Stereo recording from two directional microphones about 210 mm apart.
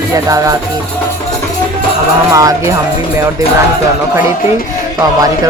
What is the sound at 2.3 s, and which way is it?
Speech, 15° right (ahead or behind).